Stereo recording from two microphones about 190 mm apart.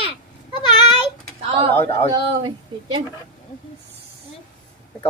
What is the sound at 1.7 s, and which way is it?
Speech, 10° left (ahead or behind).